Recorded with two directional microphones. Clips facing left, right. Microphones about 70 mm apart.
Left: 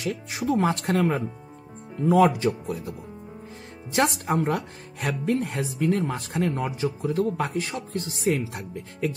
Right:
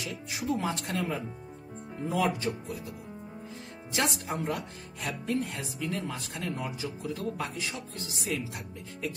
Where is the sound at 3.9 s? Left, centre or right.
Left.